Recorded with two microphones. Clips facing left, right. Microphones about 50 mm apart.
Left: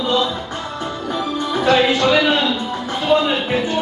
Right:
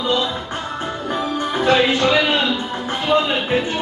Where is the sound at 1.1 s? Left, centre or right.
Right.